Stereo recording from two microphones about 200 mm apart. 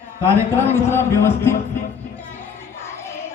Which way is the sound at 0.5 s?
10° left (ahead or behind).